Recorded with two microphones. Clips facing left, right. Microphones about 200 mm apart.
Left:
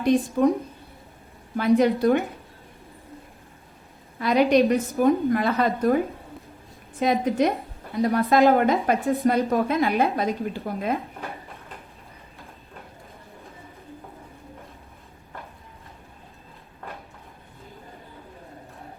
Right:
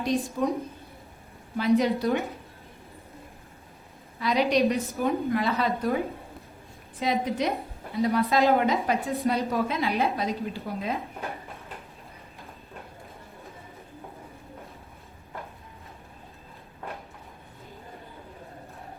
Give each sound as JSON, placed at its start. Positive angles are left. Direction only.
{"t": 0.4, "sound": "a woman's voice", "side_deg": 55}
{"t": 1.5, "sound": "a woman's voice", "side_deg": 50}
{"t": 4.2, "sound": "a woman's voice", "side_deg": 50}
{"t": 7.0, "sound": "a woman's voice", "side_deg": 50}